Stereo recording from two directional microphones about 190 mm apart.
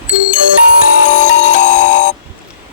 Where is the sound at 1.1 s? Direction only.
40° left (ahead or behind).